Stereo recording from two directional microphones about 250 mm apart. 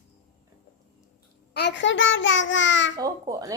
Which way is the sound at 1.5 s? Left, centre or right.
Left.